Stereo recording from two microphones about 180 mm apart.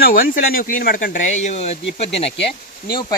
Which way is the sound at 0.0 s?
55° left (ahead or behind).